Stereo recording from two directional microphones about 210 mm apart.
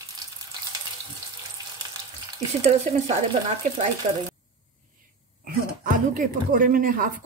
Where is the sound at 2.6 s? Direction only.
35° right (ahead or behind).